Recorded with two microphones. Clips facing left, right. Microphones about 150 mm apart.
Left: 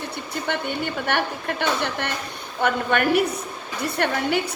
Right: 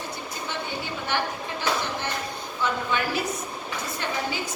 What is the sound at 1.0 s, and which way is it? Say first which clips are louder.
A woman's voice: left 2 dB; 65° left (ahead or behind).